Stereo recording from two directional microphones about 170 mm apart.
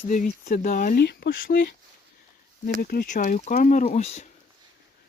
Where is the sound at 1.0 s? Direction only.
75° left (ahead or behind).